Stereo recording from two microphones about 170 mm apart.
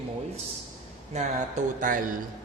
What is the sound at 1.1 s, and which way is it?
A man's voice, 45° right (ahead or behind).